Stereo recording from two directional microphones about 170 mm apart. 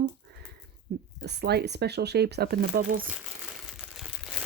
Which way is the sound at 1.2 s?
80° right.